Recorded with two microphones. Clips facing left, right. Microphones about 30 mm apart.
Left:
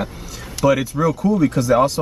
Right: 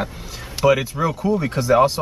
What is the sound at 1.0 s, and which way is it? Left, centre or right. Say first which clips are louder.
Speech: left 4 dB; right.